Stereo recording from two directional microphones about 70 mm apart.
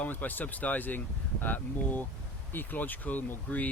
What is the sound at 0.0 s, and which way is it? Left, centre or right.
Speech, left.